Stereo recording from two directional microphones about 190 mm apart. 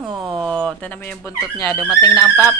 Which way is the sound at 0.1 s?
25° right (ahead or behind).